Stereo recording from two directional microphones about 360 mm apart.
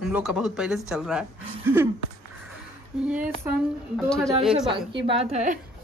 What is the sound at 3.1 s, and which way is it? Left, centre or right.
Speech, centre.